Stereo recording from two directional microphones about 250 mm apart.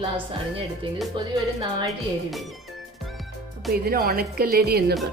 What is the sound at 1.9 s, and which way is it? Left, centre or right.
Speech, centre.